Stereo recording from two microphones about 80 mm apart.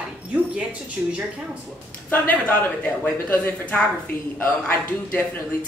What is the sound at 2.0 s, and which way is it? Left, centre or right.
Speech, left.